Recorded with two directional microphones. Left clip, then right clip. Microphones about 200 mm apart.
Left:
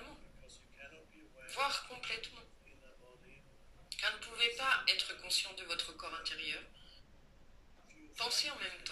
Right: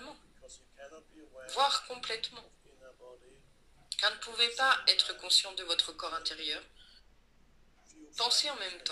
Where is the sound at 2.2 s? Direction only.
25° right (ahead or behind).